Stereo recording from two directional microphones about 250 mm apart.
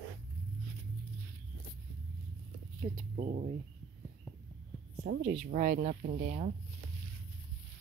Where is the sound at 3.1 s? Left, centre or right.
Right.